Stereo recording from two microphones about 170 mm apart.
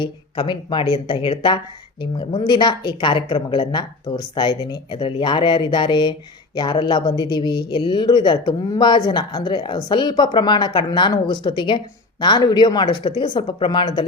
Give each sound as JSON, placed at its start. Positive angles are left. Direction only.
{"t": 0.0, "sound": "speech", "side_deg": 30}